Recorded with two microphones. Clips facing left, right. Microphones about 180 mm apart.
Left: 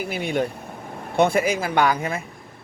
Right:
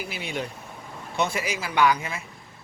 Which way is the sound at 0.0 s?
50° left (ahead or behind).